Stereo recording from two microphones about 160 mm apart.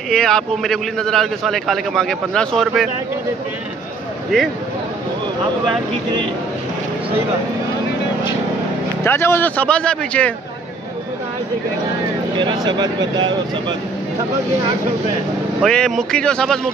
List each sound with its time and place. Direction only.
0.1 s a man's voice: 5° left (ahead or behind)
9.0 s a man's voice: 15° left (ahead or behind)
12.4 s speech: 30° right (ahead or behind)
15.6 s a man's voice: 5° left (ahead or behind)